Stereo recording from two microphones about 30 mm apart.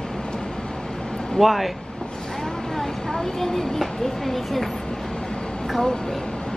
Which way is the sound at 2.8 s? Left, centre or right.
Centre.